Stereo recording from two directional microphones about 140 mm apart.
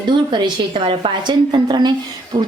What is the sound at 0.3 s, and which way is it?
A woman's voice, 35° right (ahead or behind).